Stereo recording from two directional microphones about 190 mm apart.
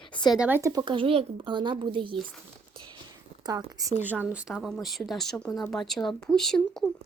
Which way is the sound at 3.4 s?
20° right (ahead or behind).